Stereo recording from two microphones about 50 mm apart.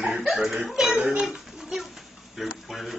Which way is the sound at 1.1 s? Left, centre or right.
Centre.